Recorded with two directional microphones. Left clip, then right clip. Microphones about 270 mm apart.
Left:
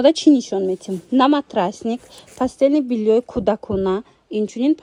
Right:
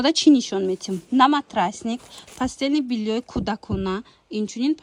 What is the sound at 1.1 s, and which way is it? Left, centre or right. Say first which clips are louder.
Speech: left 1 dB; centre.